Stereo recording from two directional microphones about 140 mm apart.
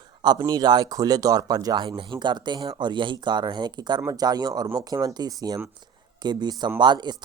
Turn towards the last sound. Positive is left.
turn(degrees=-30)  # may be behind; listen again after turning